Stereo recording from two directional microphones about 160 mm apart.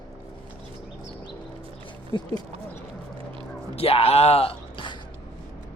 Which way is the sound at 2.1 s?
30° left (ahead or behind).